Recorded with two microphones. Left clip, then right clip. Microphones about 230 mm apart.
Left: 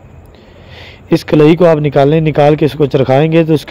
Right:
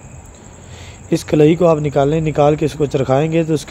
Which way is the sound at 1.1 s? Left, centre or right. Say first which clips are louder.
Left 5 dB; left.